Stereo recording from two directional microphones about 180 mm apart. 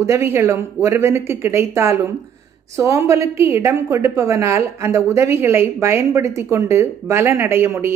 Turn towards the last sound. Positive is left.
turn(degrees=-15)  # may be behind; listen again after turning